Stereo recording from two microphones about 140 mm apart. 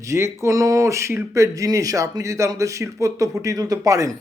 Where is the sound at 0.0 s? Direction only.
20° right (ahead or behind).